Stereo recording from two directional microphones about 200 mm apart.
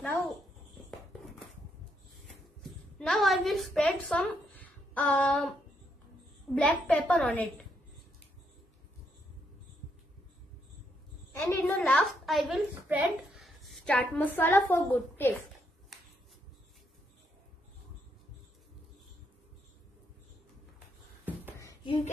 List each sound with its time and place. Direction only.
3.0 s a woman's voice: centre (ahead or behind)
6.5 s a woman's voice: 5° left (ahead or behind)
11.3 s a woman's voice: 10° left (ahead or behind)
21.8 s speech: 30° left (ahead or behind)